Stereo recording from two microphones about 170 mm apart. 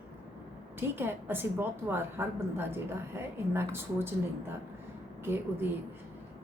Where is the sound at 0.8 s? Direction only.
15° right (ahead or behind).